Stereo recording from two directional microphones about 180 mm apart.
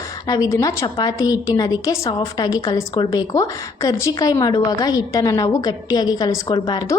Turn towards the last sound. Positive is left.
turn(degrees=25)  # may be behind; listen again after turning